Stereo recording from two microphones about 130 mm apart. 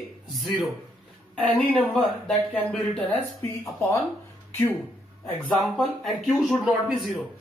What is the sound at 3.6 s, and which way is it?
Speech, 20° left (ahead or behind).